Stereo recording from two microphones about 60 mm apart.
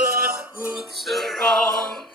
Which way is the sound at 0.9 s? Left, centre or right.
Centre.